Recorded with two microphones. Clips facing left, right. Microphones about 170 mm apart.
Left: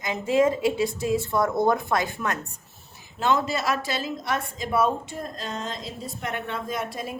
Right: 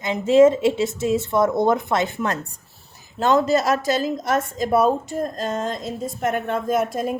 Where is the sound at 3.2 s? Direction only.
40° right (ahead or behind).